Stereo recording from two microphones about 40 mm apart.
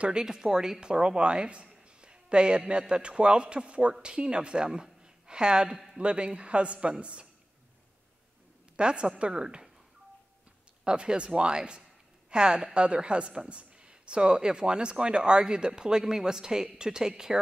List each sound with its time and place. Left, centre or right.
0.2 s a woman's voice: centre
5.0 s a sound: right
5.9 s a woman's voice: right
8.7 s a woman's voice: right
10.8 s a woman's voice: right